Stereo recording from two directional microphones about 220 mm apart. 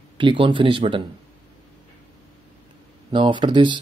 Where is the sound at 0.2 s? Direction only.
20° right (ahead or behind).